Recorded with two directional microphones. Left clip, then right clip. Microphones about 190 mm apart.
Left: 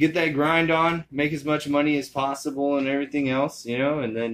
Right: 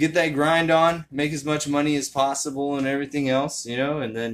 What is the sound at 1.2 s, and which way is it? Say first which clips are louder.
Speech: even; 80° right.